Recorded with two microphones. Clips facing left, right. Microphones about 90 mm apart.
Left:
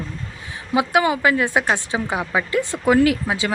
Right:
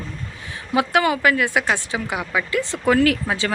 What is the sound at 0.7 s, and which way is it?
A woman's voice, 20° left (ahead or behind).